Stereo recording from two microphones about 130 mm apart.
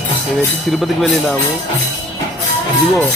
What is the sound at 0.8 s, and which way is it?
Speech, centre (ahead or behind).